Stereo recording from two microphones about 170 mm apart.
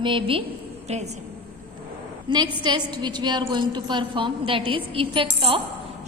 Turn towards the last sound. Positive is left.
turn(degrees=-30)  # may be behind; listen again after turning